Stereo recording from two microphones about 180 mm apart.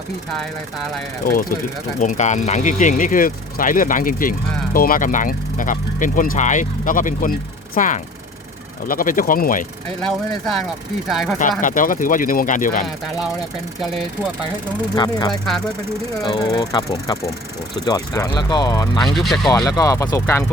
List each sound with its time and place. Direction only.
2.0 s speech: 45° left (ahead or behind)
10.1 s speech: centre (ahead or behind)
11.6 s speech: 50° left (ahead or behind)
14.9 s speech: 20° left (ahead or behind)
15.3 s speech: centre (ahead or behind)
16.2 s speech: 25° left (ahead or behind)
19.1 s speech: centre (ahead or behind)
19.6 s speech: 20° left (ahead or behind)